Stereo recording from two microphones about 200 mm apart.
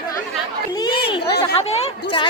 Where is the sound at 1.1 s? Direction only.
25° left (ahead or behind).